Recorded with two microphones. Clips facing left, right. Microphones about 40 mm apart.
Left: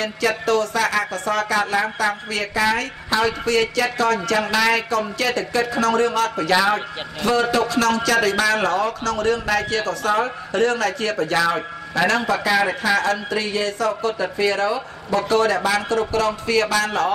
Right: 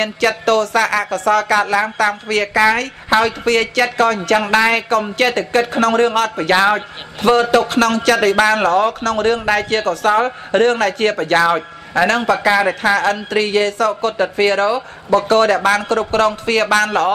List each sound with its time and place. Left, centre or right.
0.0 s speech: right